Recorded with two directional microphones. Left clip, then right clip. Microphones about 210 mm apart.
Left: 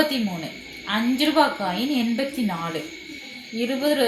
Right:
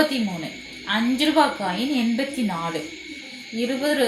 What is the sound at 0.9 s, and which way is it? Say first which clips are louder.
Speech: right 1 dB; 15° left (ahead or behind).